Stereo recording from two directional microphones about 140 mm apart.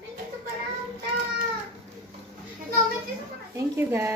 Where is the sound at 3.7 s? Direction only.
20° right (ahead or behind).